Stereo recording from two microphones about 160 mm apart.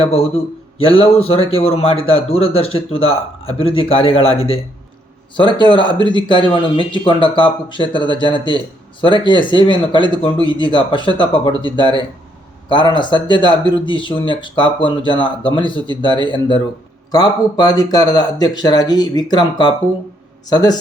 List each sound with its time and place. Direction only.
0.0 s a man's voice: 40° left (ahead or behind)